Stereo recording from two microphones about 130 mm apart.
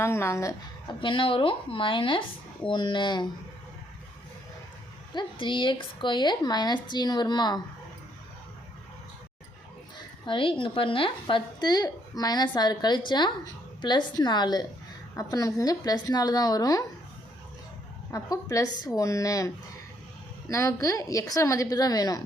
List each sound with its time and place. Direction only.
0.0 s a woman's voice: 20° left (ahead or behind)
0.9 s a woman's voice: 40° left (ahead or behind)
5.1 s a woman's voice: 40° left (ahead or behind)
10.2 s a woman's voice: 40° left (ahead or behind)
18.1 s a woman's voice: 25° left (ahead or behind)
20.5 s a woman's voice: 25° left (ahead or behind)